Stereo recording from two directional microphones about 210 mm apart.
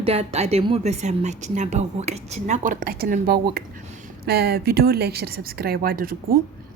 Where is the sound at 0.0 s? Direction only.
30° right (ahead or behind); by 6.1 s 45° right (ahead or behind).